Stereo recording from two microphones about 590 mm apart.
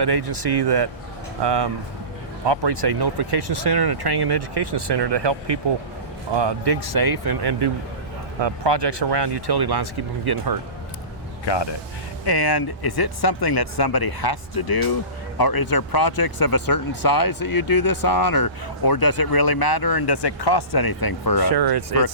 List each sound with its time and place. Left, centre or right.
0.0 s speech: right
11.4 s speech: left
21.5 s speech: right